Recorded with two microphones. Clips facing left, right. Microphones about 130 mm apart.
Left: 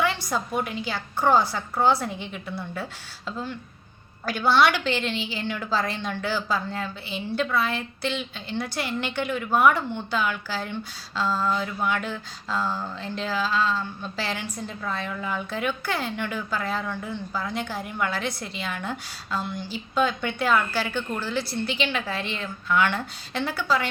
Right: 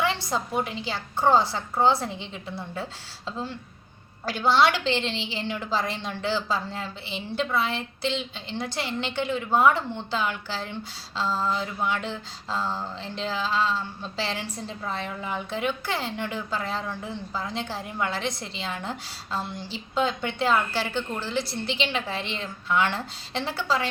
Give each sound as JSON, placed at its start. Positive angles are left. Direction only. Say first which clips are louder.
{"t": 0.0, "sound": "a woman's voice", "louder": "left 1 dB", "side_deg": -25}